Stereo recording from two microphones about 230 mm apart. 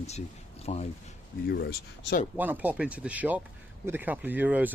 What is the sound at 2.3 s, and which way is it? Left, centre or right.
Speech, centre.